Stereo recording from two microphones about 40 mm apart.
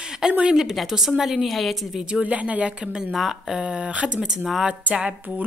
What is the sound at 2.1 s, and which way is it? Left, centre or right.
Speech, right.